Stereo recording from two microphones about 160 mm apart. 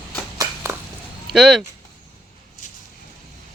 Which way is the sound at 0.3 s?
15° right (ahead or behind).